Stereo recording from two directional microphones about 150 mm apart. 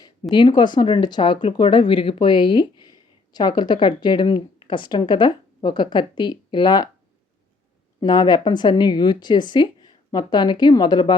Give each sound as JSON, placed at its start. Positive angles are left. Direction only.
{"t": 0.0, "sound": "speech", "side_deg": 30}
{"t": 8.0, "sound": "speech", "side_deg": 30}